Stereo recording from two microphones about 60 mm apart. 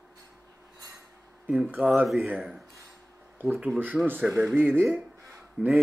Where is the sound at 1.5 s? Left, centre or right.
Right.